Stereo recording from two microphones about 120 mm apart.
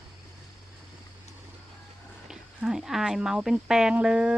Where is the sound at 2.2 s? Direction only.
5° right (ahead or behind).